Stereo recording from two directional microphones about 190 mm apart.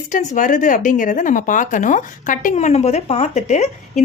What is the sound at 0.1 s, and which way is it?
A woman's voice, 40° left (ahead or behind).